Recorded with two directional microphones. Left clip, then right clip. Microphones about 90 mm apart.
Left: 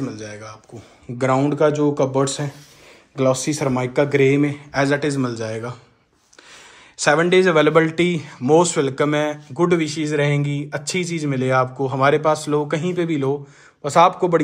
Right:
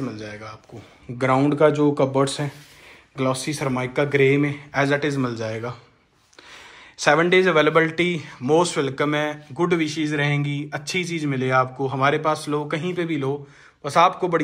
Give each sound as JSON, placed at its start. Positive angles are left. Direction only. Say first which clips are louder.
{"t": 0.1, "sound": "a man's voice", "louder": "left 1 dB", "side_deg": 40}
{"t": 1.4, "sound": "speech", "louder": "right 2 dB", "side_deg": 35}
{"t": 3.2, "sound": "speech", "louder": "left 5 dB", "side_deg": 90}
{"t": 4.4, "sound": "a man's voice", "louder": "left 2 dB", "side_deg": 55}
{"t": 7.0, "sound": "speech", "louder": "left 1 dB", "side_deg": 45}
{"t": 11.3, "sound": "speech", "louder": "left 2 dB", "side_deg": 70}